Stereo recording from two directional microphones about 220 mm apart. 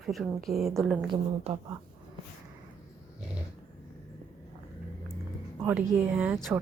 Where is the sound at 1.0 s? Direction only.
20° right (ahead or behind).